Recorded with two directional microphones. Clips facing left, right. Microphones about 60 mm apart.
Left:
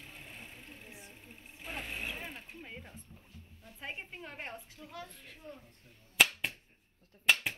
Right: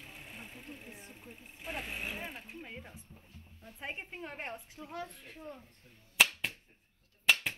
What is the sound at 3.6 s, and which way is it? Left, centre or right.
A woman's voice, right.